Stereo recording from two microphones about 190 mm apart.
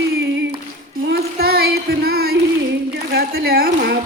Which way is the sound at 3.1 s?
55° right (ahead or behind).